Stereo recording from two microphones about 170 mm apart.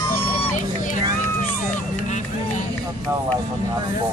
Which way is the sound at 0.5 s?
50° left (ahead or behind).